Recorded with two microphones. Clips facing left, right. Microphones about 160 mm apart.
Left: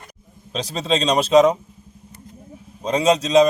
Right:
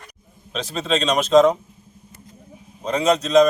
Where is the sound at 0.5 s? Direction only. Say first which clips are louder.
Left 1 dB; 35° left (ahead or behind).